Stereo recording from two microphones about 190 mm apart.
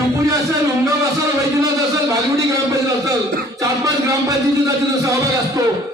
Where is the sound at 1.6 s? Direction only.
15° right (ahead or behind).